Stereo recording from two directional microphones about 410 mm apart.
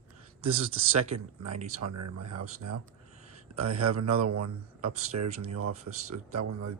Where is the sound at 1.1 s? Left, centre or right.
Right.